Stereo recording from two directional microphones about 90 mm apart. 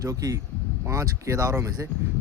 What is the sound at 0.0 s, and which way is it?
Speech, 40° right (ahead or behind).